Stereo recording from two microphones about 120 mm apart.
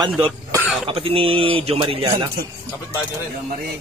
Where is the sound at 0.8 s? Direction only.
50° right (ahead or behind).